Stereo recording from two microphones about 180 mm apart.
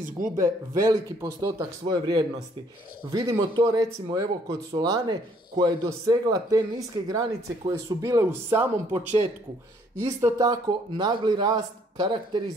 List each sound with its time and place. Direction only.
0.4 s speech: 20° right (ahead or behind)
10.0 s speech: 20° right (ahead or behind)